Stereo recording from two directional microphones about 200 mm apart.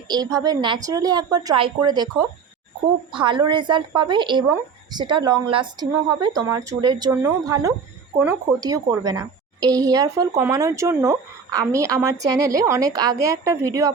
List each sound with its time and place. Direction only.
0.1 s speech: 20° right (ahead or behind)
3.2 s speech: 25° right (ahead or behind)
8.2 s speech: 5° right (ahead or behind)
9.0 s speech: 20° right (ahead or behind)